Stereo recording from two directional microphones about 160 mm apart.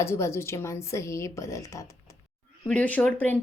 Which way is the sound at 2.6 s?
10° left (ahead or behind).